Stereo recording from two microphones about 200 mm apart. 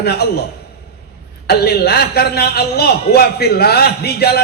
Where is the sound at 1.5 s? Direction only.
50° left (ahead or behind).